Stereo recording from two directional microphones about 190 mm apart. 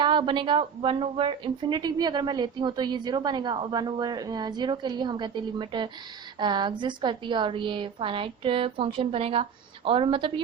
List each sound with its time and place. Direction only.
0.0 s speech: 25° right (ahead or behind)